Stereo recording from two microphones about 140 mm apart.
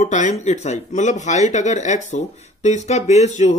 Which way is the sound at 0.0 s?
60° left (ahead or behind).